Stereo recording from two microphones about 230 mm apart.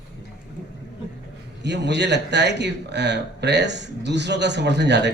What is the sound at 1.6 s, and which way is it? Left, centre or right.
A man's voice, right.